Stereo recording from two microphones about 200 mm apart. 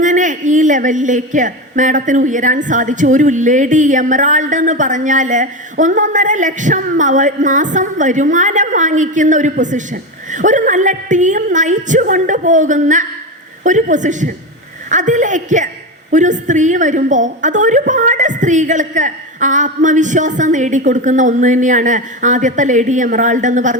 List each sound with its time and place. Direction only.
0.0 s speech: 40° right (ahead or behind)